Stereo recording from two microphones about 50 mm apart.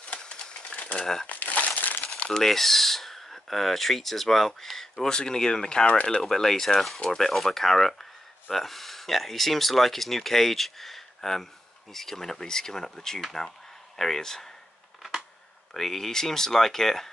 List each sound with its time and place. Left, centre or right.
0.2 s a sound: centre
0.9 s speech: centre
1.2 s crushing: left
2.2 s speech: centre
6.2 s speech: centre
15.7 s speech: centre